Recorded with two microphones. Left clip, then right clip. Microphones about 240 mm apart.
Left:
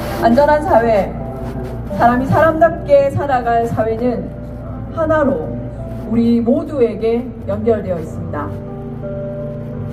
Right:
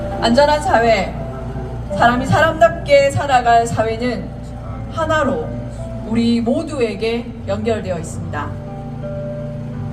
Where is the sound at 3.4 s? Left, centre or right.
Right.